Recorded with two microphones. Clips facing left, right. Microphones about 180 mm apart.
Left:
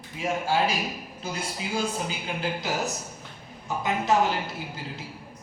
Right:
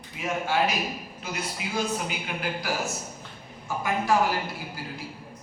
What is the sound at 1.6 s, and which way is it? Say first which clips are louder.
A man's voice: even; 30° left (ahead or behind).